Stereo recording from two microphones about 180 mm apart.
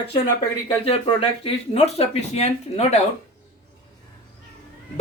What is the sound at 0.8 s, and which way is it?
Speech, 30° left (ahead or behind).